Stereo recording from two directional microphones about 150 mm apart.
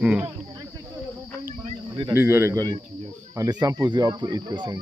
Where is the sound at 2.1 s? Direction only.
15° right (ahead or behind).